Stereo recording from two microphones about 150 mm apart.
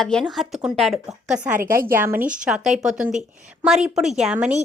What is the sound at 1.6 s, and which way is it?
Speech, 70° right (ahead or behind).